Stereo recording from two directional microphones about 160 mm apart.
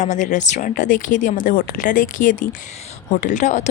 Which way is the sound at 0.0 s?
50° left (ahead or behind).